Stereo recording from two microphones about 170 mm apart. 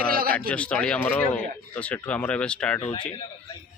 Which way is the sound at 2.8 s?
25° left (ahead or behind).